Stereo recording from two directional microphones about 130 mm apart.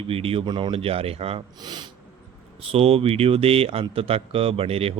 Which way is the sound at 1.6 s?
35° right (ahead or behind).